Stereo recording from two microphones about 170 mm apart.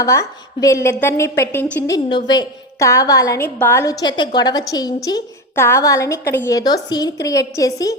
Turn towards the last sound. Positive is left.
turn(degrees=20)  # may be behind; listen again after turning